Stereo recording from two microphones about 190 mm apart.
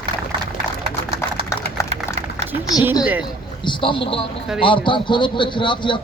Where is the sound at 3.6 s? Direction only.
25° left (ahead or behind).